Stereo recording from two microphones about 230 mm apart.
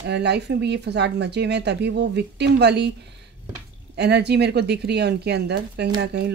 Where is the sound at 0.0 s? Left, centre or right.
Right.